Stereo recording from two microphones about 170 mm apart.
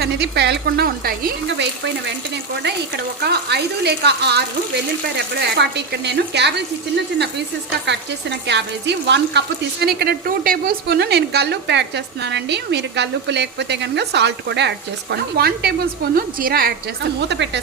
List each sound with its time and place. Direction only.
0.0 s speech: 75° right (ahead or behind); by 2.1 s 90° right
3.2 s a woman's voice: 70° right (ahead or behind)
7.9 s speech: 90° right
9.8 s a woman's voice: 70° right (ahead or behind); by 14.7 s 90° right
15.1 s speech: 70° right (ahead or behind)
16.1 s speech: 60° right (ahead or behind); by 17.6 s 90° right